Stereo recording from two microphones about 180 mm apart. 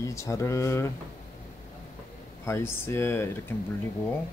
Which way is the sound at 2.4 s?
15° left (ahead or behind).